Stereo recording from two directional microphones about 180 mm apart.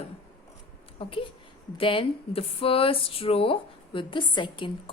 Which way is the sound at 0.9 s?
30° left (ahead or behind).